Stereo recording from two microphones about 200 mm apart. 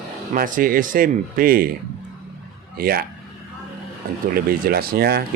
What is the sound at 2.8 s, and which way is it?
Speech, 50° right (ahead or behind).